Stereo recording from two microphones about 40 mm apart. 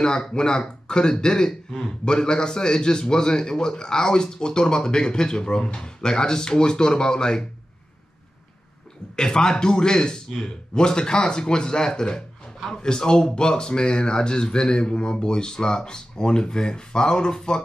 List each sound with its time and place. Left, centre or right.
0.0 s speech: centre
9.1 s speech: centre